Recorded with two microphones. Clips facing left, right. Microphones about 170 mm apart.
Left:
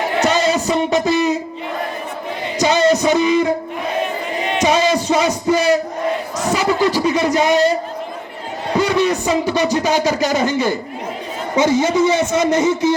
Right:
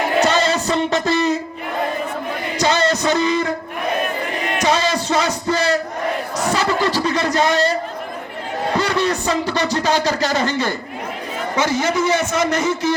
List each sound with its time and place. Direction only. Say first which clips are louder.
0.3 s music: left 2 dB; 10° left (ahead or behind)
2.6 s music: left 4 dB; 15° left (ahead or behind)
4.5 s a sound: left 3 dB; 15° left (ahead or behind)
5.0 s music: left 3 dB; 15° left (ahead or behind)
5.5 s battle cry: left 5 dB; 15° left (ahead or behind)
6.5 s a sound: left 3 dB; 15° left (ahead or behind)
9.7 s speech: left 2 dB; 15° left (ahead or behind)
11.6 s a man's voice: left 5 dB; 25° left (ahead or behind)